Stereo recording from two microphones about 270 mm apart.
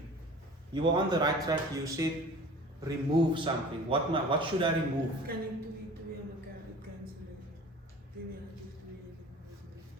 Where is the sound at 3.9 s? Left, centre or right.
Centre.